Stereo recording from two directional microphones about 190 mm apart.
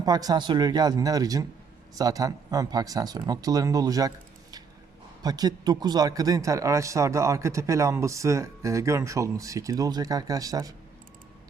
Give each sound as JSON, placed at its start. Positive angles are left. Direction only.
{"t": 0.0, "sound": "speech", "side_deg": -20}
{"t": 5.2, "sound": "a man's voice", "side_deg": -20}